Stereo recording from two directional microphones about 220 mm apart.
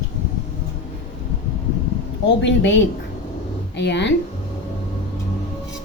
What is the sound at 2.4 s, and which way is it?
A woman's voice, 55° left (ahead or behind).